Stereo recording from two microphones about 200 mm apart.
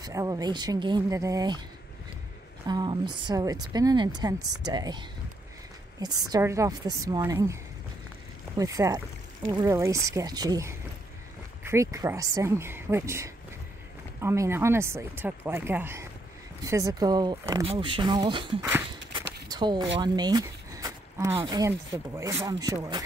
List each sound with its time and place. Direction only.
0.0 s speech: 15° right (ahead or behind)
2.7 s speech: 20° right (ahead or behind)
6.2 s speech: 15° right (ahead or behind)
8.5 s speech: 15° right (ahead or behind)